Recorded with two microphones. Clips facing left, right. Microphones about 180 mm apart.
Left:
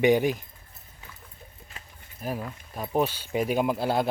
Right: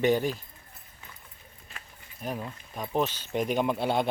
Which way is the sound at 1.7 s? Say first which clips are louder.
Left 1 dB; 20° left (ahead or behind).